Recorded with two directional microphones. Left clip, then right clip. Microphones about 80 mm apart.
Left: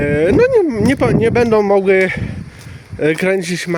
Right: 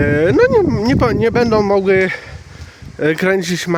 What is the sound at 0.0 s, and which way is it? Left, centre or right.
Speech, right.